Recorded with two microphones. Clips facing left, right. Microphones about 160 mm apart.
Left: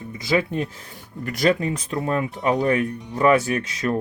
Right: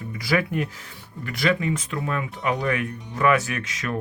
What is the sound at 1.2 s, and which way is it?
Speech, 40° left (ahead or behind).